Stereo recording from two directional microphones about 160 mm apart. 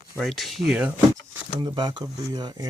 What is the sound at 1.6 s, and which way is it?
Speech, 30° right (ahead or behind).